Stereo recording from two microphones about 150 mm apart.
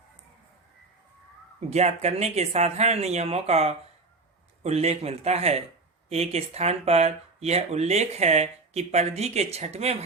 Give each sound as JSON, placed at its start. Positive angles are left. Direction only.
{"t": 1.7, "sound": "speech", "side_deg": -45}